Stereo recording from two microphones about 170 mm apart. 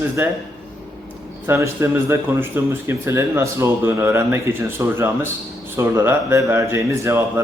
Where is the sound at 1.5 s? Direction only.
15° right (ahead or behind).